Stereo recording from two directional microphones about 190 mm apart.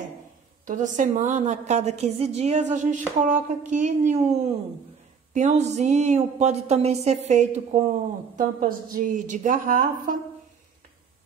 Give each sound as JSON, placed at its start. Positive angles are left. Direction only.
{"t": 0.7, "sound": "a woman's voice", "side_deg": -40}